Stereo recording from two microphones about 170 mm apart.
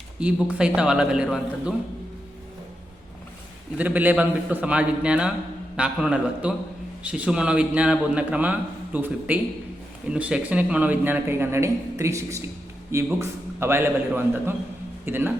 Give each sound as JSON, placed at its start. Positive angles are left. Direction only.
{"t": 0.2, "sound": "a man's voice", "side_deg": -5}
{"t": 3.8, "sound": "a man's voice", "side_deg": -10}